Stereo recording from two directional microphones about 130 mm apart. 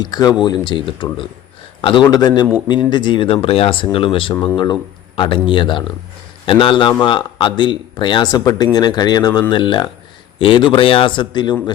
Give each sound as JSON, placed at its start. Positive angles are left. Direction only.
{"t": 0.0, "sound": "speech", "side_deg": 30}